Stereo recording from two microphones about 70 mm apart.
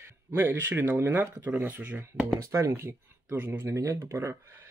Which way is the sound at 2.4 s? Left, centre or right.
Right.